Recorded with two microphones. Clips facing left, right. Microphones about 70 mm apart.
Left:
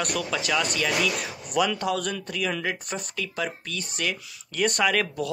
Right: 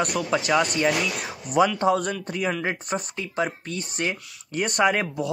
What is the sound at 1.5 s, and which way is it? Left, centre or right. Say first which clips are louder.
Speech: right 5 dB; right.